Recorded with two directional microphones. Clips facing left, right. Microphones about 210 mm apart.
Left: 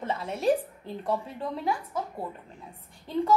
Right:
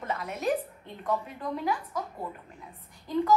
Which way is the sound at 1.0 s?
30° left (ahead or behind).